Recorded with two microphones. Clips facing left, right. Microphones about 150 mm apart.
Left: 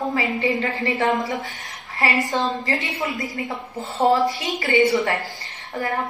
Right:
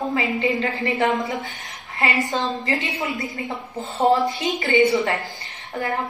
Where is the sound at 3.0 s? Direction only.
20° right (ahead or behind).